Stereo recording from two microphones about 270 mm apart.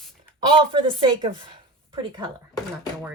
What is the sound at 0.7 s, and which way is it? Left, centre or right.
Speech, centre.